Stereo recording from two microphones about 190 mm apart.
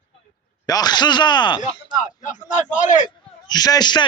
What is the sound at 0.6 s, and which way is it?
Speech, 20° left (ahead or behind).